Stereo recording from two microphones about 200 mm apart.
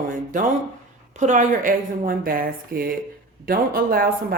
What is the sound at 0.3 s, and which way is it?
Speech, 40° right (ahead or behind).